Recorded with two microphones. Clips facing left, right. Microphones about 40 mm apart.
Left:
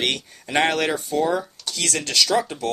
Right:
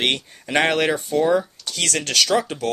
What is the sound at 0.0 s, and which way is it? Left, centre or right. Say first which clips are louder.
Speech: right 2 dB; right.